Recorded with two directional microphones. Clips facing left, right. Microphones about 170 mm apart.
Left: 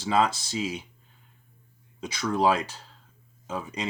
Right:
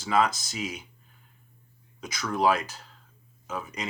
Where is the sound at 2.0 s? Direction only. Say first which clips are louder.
Left 1 dB; 30° left (ahead or behind).